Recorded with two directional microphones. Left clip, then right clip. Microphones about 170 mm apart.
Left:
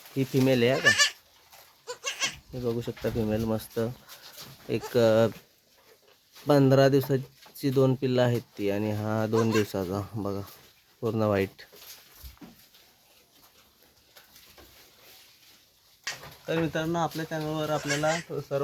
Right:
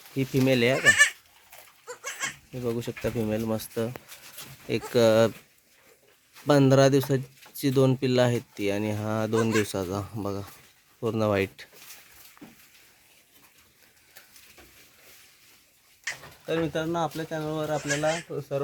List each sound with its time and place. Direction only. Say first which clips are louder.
0.2 s speech: even; centre (ahead or behind)
0.9 s speech: right 4 dB; 10° left (ahead or behind)
1.9 s goat: left 3 dB; 20° left (ahead or behind)
2.5 s speech: even; 5° right (ahead or behind)
6.5 s speech: right 1 dB; 5° right (ahead or behind)
16.5 s speech: right 1 dB; 5° right (ahead or behind)